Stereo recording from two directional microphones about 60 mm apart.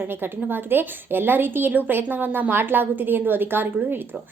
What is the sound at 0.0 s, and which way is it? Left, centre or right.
A woman's voice, right.